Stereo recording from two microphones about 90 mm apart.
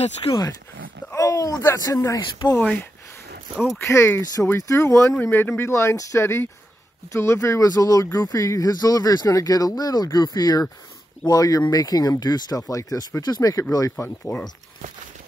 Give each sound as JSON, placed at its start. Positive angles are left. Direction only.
{"t": 0.3, "sound": "speech", "side_deg": 45}
{"t": 1.1, "sound": "a sound", "side_deg": 40}
{"t": 1.8, "sound": "speech", "side_deg": 40}
{"t": 2.6, "sound": "speech", "side_deg": 15}
{"t": 3.8, "sound": "speech", "side_deg": 30}
{"t": 13.9, "sound": "speech", "side_deg": 25}